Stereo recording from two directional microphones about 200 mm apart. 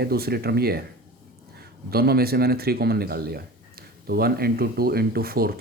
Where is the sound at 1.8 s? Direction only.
50° right (ahead or behind).